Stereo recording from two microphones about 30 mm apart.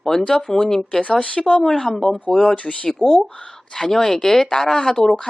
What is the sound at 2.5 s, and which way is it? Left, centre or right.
Speech, left.